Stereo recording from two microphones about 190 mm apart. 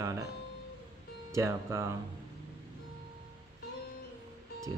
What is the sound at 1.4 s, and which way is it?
Speech, 15° right (ahead or behind).